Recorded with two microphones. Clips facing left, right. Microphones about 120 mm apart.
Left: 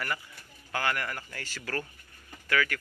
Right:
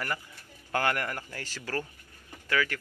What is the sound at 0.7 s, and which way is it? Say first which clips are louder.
Speech: right 3 dB; 45° right (ahead or behind).